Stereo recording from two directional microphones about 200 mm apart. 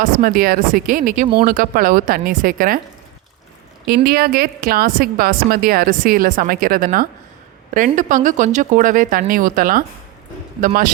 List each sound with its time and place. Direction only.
0.0 s a woman's voice: 45° right (ahead or behind)
3.8 s a woman's voice: 50° right (ahead or behind)